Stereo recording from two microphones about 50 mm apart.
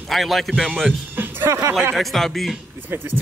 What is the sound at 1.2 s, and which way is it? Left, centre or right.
Music, right.